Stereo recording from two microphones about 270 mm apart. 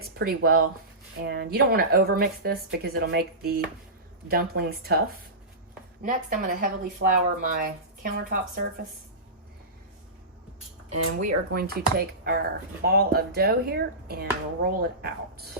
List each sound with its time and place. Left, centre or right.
0.0 s speech: right
6.0 s speech: right
10.8 s speech: right
11.5 s speech: right